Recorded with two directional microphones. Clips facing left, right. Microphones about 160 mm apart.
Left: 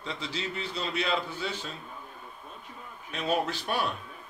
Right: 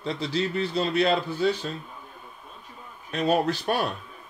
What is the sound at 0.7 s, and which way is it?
Speech, 45° right (ahead or behind).